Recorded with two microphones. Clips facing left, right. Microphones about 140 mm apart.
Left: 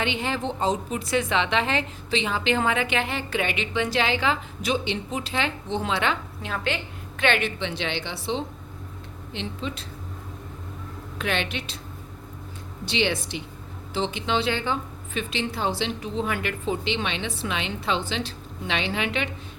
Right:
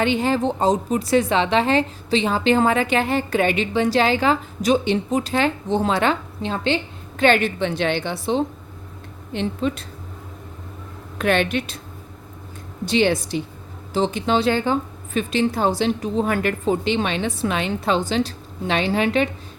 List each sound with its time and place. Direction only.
0.0 s a woman's voice: 40° right (ahead or behind)
6.4 s a woman's voice: 30° right (ahead or behind); by 9.8 s 50° right (ahead or behind)
11.2 s a woman's voice: 50° right (ahead or behind)
12.8 s a woman's voice: 45° right (ahead or behind)